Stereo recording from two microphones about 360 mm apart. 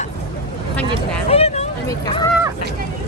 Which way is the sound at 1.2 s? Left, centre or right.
Centre.